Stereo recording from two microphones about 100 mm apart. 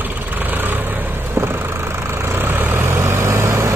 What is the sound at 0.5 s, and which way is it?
Vehicle, 20° right (ahead or behind).